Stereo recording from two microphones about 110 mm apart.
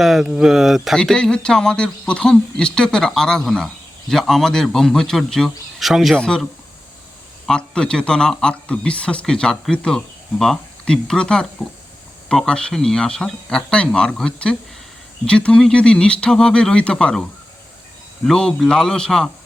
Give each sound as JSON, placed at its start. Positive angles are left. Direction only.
{"t": 0.0, "sound": "speech", "side_deg": 0}
{"t": 18.3, "sound": "speech", "side_deg": 5}